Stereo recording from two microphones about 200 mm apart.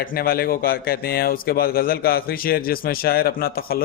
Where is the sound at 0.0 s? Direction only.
45° left (ahead or behind).